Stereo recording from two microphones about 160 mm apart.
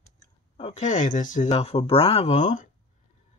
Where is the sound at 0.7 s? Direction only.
50° left (ahead or behind).